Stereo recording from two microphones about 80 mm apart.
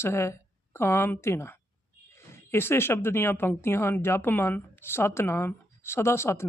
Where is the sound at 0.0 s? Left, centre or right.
Left.